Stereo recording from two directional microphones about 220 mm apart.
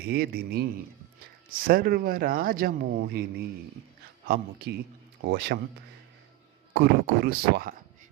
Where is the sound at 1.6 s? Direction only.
40° right (ahead or behind).